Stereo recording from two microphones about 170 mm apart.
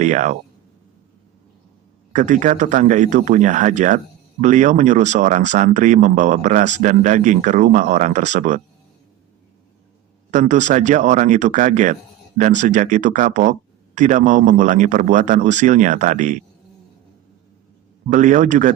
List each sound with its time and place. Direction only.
0.0 s speech: 45° right (ahead or behind)
2.1 s speech: 45° right (ahead or behind)
10.3 s speech: 45° right (ahead or behind)
18.1 s speech: 45° right (ahead or behind)